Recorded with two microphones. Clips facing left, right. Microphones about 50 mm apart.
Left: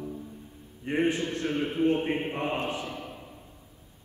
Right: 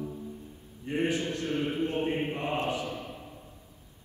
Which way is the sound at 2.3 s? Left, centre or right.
Left.